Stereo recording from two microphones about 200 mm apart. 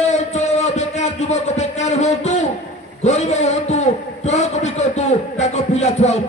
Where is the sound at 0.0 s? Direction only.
35° left (ahead or behind).